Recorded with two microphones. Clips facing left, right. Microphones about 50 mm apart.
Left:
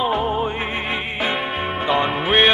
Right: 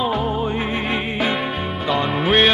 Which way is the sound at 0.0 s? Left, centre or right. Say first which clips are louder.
Left 1 dB; centre.